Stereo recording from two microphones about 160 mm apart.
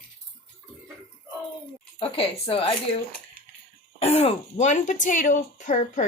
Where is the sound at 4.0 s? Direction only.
40° left (ahead or behind).